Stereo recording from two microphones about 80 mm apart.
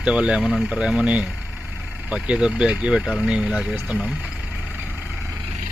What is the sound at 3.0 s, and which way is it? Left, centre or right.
Speech, centre.